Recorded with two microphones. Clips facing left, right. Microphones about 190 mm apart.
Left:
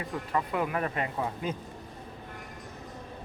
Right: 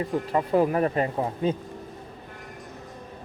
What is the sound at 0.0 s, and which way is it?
Speech, 30° right (ahead or behind).